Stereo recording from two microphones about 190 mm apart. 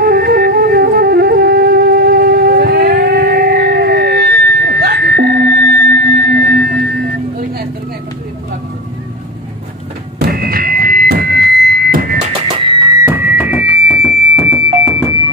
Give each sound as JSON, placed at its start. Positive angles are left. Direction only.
{"t": 0.0, "sound": "flute", "side_deg": -50}
{"t": 10.2, "sound": "a sound", "side_deg": -50}
{"t": 12.5, "sound": "music", "side_deg": -25}